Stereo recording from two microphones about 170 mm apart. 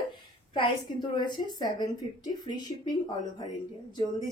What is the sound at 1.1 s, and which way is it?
A woman's voice, 25° left (ahead or behind).